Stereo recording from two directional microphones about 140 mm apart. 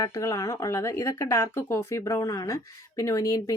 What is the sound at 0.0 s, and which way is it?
Speech, 25° left (ahead or behind).